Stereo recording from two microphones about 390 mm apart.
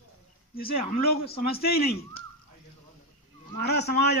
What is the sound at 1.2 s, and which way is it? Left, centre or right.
Speech, left.